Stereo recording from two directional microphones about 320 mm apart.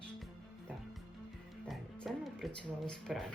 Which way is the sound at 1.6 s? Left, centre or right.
Centre.